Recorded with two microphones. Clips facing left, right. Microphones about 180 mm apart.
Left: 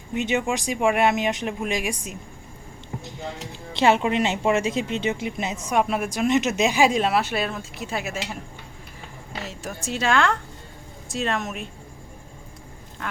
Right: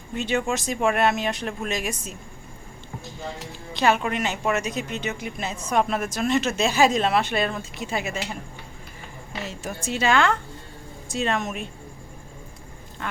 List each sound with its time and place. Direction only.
0.1 s a woman's voice: 20° left (ahead or behind)
3.0 s a sound: 20° left (ahead or behind)
3.8 s a woman's voice: 25° left (ahead or behind); by 8.4 s 5° left (ahead or behind)
9.4 s speech: centre (ahead or behind)
13.0 s speech: centre (ahead or behind)